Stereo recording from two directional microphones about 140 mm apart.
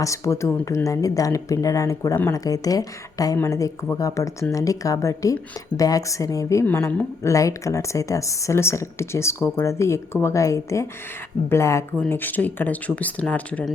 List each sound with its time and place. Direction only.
0.0 s speech: 20° left (ahead or behind)